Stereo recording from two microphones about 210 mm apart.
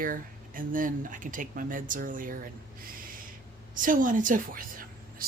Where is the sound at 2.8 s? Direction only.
40° right (ahead or behind).